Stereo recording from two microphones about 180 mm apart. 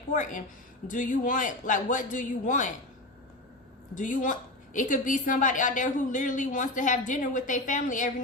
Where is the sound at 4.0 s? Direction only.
45° left (ahead or behind).